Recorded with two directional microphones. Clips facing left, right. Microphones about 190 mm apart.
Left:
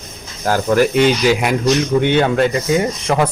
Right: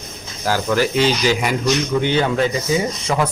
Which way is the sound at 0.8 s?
60° left (ahead or behind).